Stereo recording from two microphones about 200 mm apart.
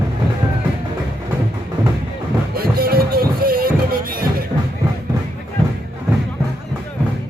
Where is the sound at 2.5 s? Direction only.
50° right (ahead or behind).